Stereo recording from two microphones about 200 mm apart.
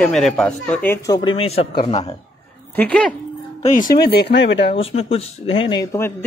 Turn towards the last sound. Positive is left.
turn(degrees=15)  # may be behind; listen again after turning